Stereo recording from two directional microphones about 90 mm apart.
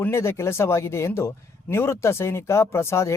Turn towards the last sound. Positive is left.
turn(degrees=30)  # may be behind; listen again after turning